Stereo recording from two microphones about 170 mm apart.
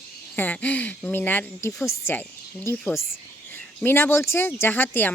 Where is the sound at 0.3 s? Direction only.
10° left (ahead or behind).